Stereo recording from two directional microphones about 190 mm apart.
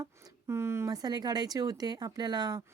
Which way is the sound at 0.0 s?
15° right (ahead or behind).